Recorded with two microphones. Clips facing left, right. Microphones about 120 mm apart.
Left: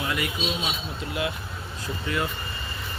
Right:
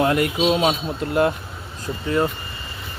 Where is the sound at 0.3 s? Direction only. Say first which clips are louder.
Right 11 dB; 65° right (ahead or behind).